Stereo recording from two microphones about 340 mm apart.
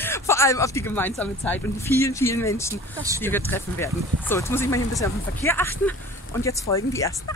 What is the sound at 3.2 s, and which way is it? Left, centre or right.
Speech, centre.